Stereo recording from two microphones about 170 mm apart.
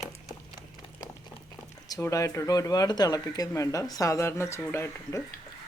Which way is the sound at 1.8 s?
20° left (ahead or behind).